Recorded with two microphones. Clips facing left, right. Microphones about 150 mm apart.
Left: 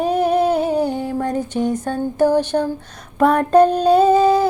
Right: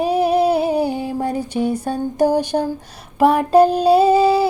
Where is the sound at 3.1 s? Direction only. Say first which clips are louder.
Even; 5° right (ahead or behind).